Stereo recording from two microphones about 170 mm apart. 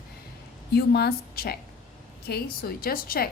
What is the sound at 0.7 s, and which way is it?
Speech, 70° left (ahead or behind).